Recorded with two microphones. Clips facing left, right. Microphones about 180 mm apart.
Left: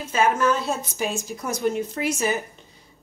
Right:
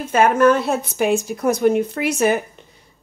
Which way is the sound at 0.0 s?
55° right (ahead or behind).